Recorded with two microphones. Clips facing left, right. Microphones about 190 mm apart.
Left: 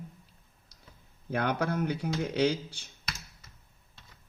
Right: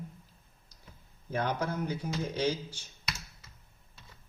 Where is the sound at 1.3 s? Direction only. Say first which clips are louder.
Left 3 dB; 65° left (ahead or behind).